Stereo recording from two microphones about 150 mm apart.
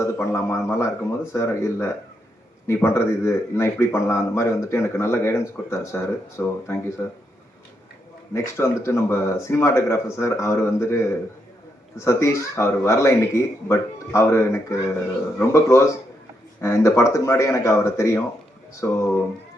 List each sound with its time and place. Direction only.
0.0 s a man's voice: 20° left (ahead or behind)
8.3 s speech: 15° left (ahead or behind)